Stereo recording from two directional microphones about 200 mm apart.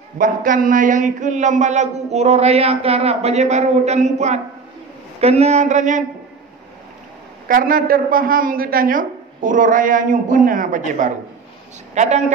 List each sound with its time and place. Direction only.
0.2 s speech: 40° right (ahead or behind)
7.4 s a woman's voice: 45° right (ahead or behind)